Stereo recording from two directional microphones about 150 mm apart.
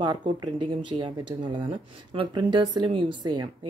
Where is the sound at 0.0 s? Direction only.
30° right (ahead or behind).